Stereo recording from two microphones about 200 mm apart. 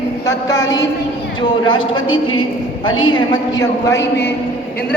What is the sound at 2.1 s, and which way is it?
A woman's voice, 90° left.